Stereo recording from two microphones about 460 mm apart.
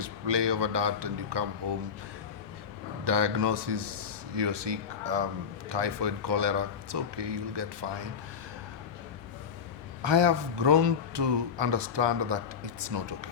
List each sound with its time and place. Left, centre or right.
0.0 s speech: right
3.0 s speech: right
10.0 s speech: right